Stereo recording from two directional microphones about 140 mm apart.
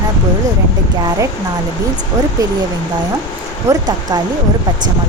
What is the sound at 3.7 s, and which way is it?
Speech, 30° right (ahead or behind).